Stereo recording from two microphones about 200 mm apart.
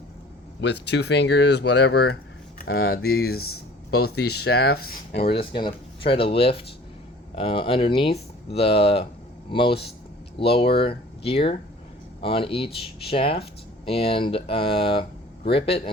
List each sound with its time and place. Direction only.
0.6 s speech: 60° left (ahead or behind)
5.3 s speech: 25° left (ahead or behind)